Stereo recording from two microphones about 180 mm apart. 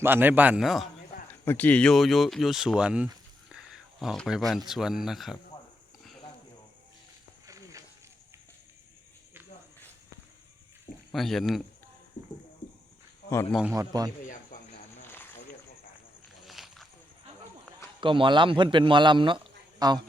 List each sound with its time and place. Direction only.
0.0 s a man's voice: 10° right (ahead or behind)
1.3 s speech: 10° left (ahead or behind)
7.4 s a sound: 20° right (ahead or behind)
11.1 s speech: centre (ahead or behind)
13.5 s speech: 5° right (ahead or behind)
13.7 s a man's voice: 20° right (ahead or behind)
15.0 s snake: 10° left (ahead or behind)
16.5 s walk: centre (ahead or behind)
18.0 s a man's voice: 30° right (ahead or behind)